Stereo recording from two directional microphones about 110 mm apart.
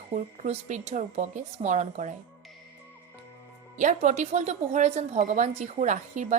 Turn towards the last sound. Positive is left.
turn(degrees=-90)